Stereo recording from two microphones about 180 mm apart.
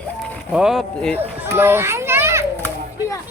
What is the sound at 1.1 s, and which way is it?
Children playing, 10° right (ahead or behind).